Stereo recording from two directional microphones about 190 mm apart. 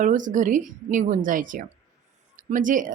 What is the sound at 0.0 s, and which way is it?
Speech, 40° right (ahead or behind).